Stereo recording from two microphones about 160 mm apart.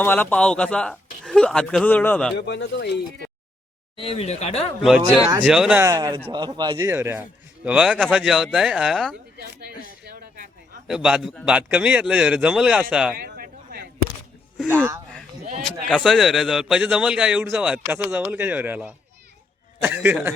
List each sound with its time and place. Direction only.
0.0 s a man's voice: 10° left (ahead or behind)
2.3 s speech: 90° left
3.9 s speech: 35° left (ahead or behind)
4.8 s a man's voice: 5° right (ahead or behind)
5.9 s a man's voice: 25° right (ahead or behind)
6.7 s a man's voice: 15° right (ahead or behind); by 9.1 s centre (ahead or behind)
9.4 s speech: 90° right
10.8 s a man's voice: 5° right (ahead or behind)
13.1 s a sound: 75° right (ahead or behind)
14.7 s speech: 15° right (ahead or behind)
15.9 s a man's voice: 5° left (ahead or behind)